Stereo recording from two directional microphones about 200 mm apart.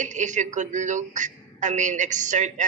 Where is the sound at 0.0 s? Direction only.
40° right (ahead or behind).